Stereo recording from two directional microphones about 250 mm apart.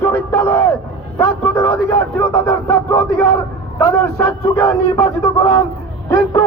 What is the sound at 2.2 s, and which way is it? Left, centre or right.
Speech, centre.